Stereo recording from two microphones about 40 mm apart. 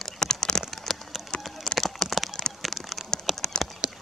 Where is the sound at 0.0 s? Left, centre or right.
Centre.